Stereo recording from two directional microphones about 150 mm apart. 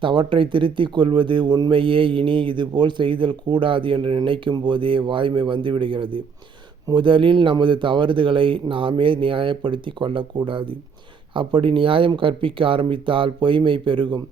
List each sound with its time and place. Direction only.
0.0 s speech: 35° right (ahead or behind)